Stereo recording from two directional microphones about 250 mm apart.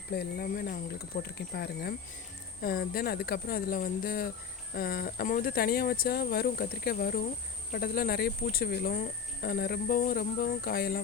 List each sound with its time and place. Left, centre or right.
0.1 s speech: left